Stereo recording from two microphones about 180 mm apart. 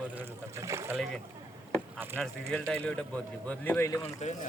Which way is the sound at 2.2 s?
5° left (ahead or behind).